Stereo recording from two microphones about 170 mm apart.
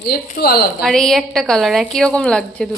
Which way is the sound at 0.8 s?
Centre (ahead or behind).